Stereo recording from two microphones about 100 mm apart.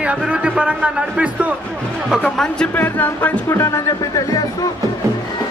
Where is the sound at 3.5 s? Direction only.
30° left (ahead or behind).